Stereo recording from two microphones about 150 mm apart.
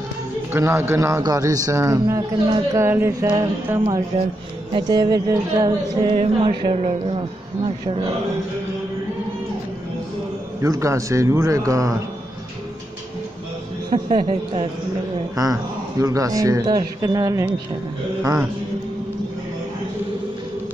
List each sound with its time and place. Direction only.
0.5 s a man's voice: 15° right (ahead or behind)
4.7 s a man's voice: 30° right (ahead or behind)
6.1 s speech: 40° right (ahead or behind)
10.6 s a man's voice: 20° right (ahead or behind)
13.8 s speech: 35° right (ahead or behind)
15.3 s a man's voice: 25° right (ahead or behind)